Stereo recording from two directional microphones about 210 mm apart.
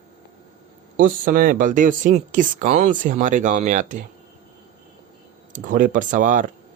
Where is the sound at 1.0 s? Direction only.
40° right (ahead or behind).